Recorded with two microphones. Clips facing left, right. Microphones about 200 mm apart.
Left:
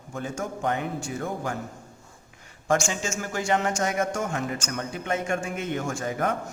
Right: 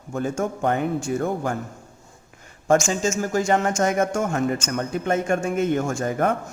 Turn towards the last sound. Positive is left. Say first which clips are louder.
# right 5 dB
turn(degrees=-50)  # may be behind; listen again after turning